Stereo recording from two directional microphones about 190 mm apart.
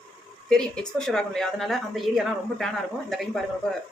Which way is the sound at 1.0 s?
5° left (ahead or behind).